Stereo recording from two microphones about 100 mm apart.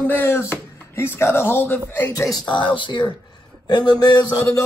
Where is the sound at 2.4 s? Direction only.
55° left (ahead or behind).